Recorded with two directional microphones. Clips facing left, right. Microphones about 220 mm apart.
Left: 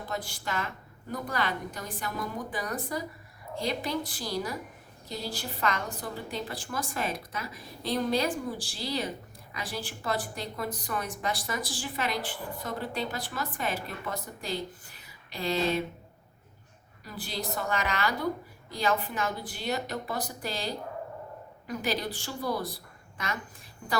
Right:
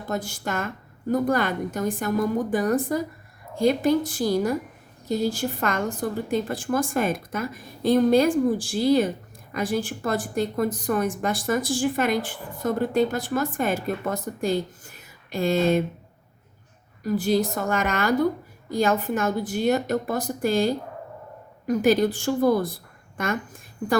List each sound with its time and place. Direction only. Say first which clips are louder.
0.1 s a woman's voice: right 7 dB; 45° right (ahead or behind)
17.0 s a woman's voice: right 15 dB; 45° right (ahead or behind)